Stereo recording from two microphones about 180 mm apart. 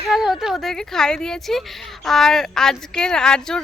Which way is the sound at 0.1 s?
5° right (ahead or behind).